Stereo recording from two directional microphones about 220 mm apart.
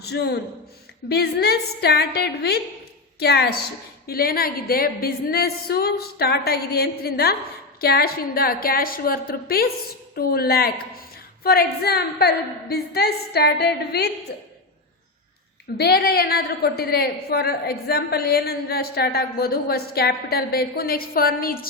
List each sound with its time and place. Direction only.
0.0 s a woman's voice: 50° left (ahead or behind)
15.8 s a woman's voice: 45° left (ahead or behind)